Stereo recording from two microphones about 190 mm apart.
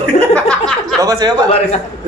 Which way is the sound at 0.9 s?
20° right (ahead or behind).